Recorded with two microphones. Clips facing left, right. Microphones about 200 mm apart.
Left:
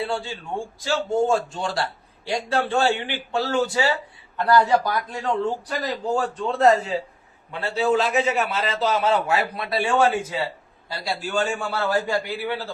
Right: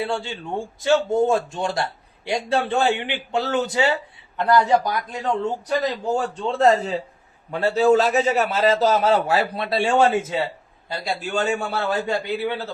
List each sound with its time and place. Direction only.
0.9 s a man's voice: 20° right (ahead or behind)